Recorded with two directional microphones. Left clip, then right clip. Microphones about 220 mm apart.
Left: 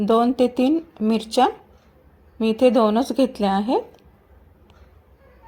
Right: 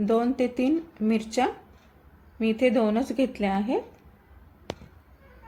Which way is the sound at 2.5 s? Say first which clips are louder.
Left 7 dB; 20° left (ahead or behind).